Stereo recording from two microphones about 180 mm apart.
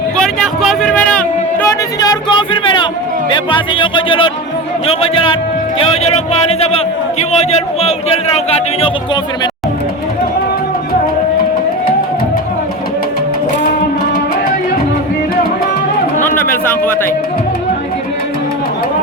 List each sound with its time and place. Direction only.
0.6 s music: centre (ahead or behind)
1.6 s music: 20° left (ahead or behind)
3.2 s a man's voice: 25° left (ahead or behind)
16.2 s speech: 10° left (ahead or behind)